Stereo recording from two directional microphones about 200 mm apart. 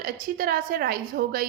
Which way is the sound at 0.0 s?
45° right (ahead or behind).